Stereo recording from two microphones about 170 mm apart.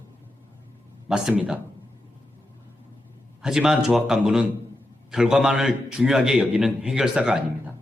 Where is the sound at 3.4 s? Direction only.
5° right (ahead or behind).